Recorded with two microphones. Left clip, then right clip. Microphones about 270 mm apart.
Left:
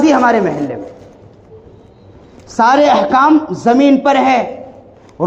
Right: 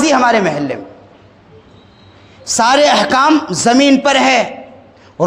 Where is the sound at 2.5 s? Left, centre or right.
Right.